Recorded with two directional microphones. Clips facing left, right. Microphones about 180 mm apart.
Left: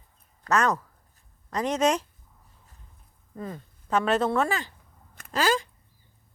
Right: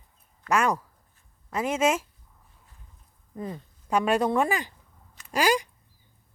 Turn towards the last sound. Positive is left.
turn(degrees=-15)  # may be behind; listen again after turning